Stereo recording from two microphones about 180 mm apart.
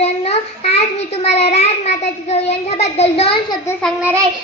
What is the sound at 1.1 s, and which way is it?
A child's voice, 35° left (ahead or behind).